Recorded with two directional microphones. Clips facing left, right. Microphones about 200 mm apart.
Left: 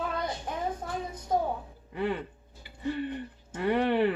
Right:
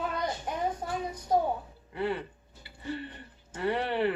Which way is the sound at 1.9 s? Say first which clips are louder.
Left 1 dB; 15° left (ahead or behind).